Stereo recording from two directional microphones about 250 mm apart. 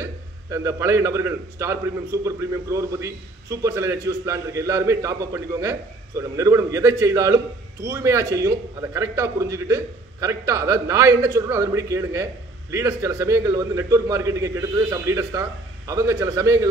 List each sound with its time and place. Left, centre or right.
0.0 s a man's voice: centre